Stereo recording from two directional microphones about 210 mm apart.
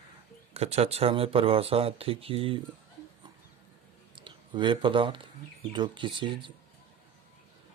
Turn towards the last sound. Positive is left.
turn(degrees=-25)  # may be behind; listen again after turning